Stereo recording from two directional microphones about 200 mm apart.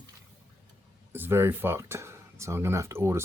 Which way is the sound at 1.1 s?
10° right (ahead or behind).